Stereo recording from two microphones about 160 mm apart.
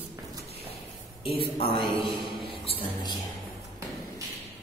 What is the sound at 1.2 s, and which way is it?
Speech, 35° left (ahead or behind).